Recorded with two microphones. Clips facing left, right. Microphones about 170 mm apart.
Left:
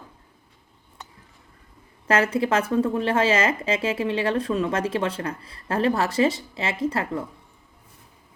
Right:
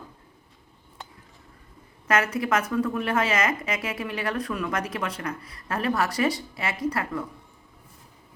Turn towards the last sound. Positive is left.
turn(degrees=25)  # may be behind; listen again after turning